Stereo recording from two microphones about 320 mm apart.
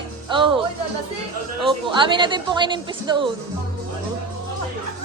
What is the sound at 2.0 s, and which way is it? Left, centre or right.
Speech, centre.